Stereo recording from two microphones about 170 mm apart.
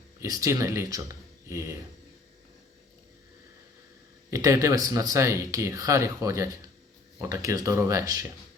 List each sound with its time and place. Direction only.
0.2 s speech: 20° right (ahead or behind)
4.3 s speech: 20° right (ahead or behind)